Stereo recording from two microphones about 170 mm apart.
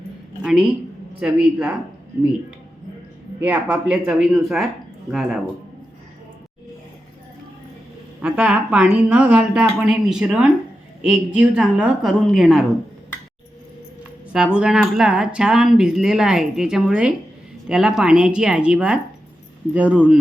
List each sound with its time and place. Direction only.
0.4 s speech: 5° right (ahead or behind)
3.4 s speech: 5° right (ahead or behind)
8.2 s speech: 5° right (ahead or behind)
14.3 s speech: 5° right (ahead or behind)